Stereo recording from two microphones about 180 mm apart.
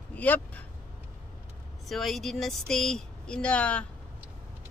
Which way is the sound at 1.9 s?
Centre (ahead or behind).